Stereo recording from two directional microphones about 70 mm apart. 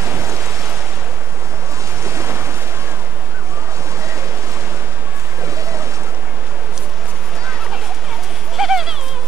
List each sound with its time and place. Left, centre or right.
0.0 s waves: right
2.0 s waves: right
5.4 s boat: right
8.5 s a sound: centre